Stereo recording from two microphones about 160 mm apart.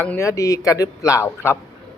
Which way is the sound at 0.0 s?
15° left (ahead or behind).